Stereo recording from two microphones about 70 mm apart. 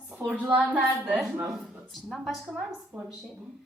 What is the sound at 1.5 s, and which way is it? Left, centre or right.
A woman's voice, centre.